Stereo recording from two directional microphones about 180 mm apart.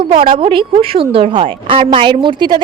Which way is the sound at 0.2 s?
30° right (ahead or behind).